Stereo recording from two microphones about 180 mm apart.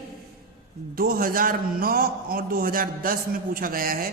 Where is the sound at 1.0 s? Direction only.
55° right (ahead or behind).